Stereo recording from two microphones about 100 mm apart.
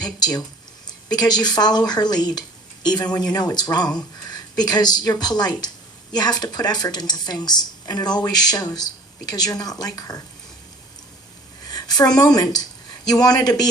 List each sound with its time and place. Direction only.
0.0 s speech: 40° left (ahead or behind)
11.7 s a sound: 40° left (ahead or behind)
12.1 s speech: 40° left (ahead or behind)